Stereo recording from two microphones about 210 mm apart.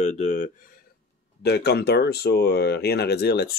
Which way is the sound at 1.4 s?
50° left (ahead or behind).